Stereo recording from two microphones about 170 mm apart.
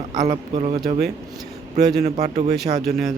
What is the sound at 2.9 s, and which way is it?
Speech, centre (ahead or behind).